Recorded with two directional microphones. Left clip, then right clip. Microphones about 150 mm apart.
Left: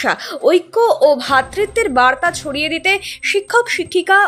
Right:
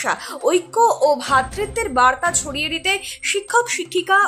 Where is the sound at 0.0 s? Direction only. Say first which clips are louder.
Left 5 dB; 25° left (ahead or behind).